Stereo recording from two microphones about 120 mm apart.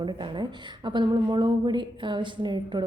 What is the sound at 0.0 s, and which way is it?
A woman's voice, 40° right (ahead or behind).